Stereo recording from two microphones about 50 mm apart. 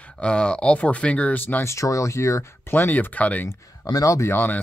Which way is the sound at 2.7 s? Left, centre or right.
Left.